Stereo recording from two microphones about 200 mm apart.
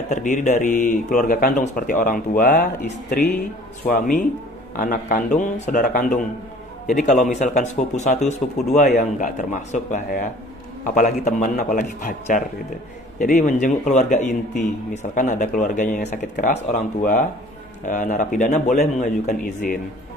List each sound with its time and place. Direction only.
0.1 s a man's voice: 40° left (ahead or behind)